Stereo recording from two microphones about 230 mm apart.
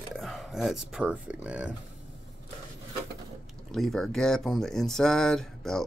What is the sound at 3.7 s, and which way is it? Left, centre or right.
Speech, centre.